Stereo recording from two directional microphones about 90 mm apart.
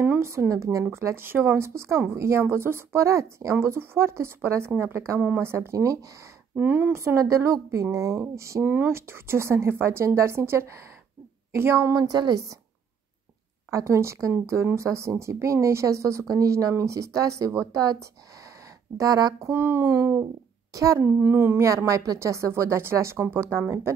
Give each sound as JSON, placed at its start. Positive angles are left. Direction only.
{"t": 0.2, "sound": "speech", "side_deg": -30}
{"t": 0.8, "sound": "speech", "side_deg": -30}
{"t": 6.5, "sound": "speech", "side_deg": -20}
{"t": 6.9, "sound": "speech", "side_deg": -30}
{"t": 8.6, "sound": "speech", "side_deg": -20}
{"t": 8.9, "sound": "speech", "side_deg": -30}
{"t": 11.9, "sound": "a woman's voice", "side_deg": -50}
{"t": 13.7, "sound": "a woman's voice", "side_deg": -35}
{"t": 19.5, "sound": "speech", "side_deg": -25}
{"t": 21.0, "sound": "speech", "side_deg": -25}
{"t": 21.6, "sound": "speech", "side_deg": -35}